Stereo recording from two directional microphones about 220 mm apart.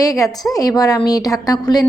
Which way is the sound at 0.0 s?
15° left (ahead or behind).